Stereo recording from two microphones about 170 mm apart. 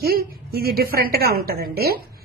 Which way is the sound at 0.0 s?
65° right (ahead or behind).